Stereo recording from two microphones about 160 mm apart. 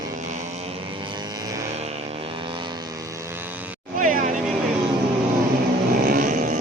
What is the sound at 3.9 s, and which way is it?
Vehicle, 55° right (ahead or behind).